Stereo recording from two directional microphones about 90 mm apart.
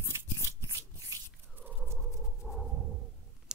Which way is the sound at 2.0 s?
Centre (ahead or behind).